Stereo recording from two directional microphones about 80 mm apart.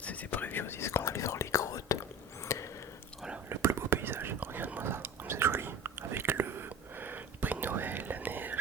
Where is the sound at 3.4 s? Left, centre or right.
Right.